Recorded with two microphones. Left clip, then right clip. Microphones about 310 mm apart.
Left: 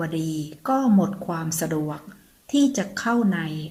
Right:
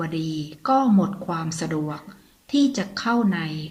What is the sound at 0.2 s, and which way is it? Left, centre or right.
A woman's voice, centre.